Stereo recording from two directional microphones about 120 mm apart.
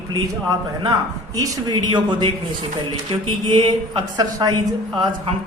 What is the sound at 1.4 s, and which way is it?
Speech, 35° right (ahead or behind).